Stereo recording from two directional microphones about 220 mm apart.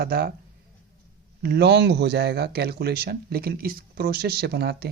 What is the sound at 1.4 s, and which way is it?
Speech, 50° right (ahead or behind).